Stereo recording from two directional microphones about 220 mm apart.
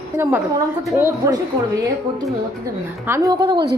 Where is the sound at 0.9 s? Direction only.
15° right (ahead or behind).